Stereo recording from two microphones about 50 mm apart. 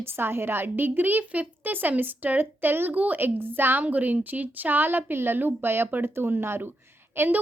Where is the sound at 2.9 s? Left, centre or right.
Right.